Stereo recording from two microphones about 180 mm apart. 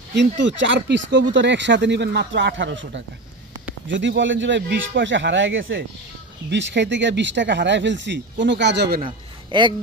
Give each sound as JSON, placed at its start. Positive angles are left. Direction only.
{"t": 0.1, "sound": "speech", "side_deg": -80}
{"t": 6.5, "sound": "speech", "side_deg": -80}
{"t": 9.0, "sound": "a man's voice", "side_deg": -25}